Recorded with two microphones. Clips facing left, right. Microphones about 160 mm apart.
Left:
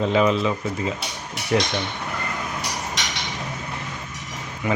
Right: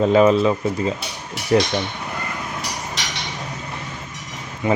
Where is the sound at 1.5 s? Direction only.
35° right (ahead or behind).